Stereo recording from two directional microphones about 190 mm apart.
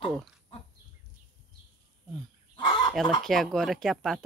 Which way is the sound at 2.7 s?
25° left (ahead or behind).